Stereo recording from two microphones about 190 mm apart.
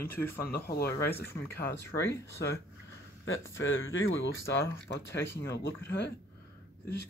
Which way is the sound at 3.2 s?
90° left.